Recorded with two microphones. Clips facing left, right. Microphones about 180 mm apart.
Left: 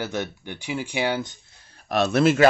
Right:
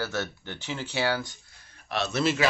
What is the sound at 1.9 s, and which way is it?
Speech, 50° left (ahead or behind).